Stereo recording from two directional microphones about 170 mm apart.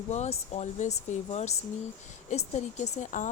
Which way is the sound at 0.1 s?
40° left (ahead or behind).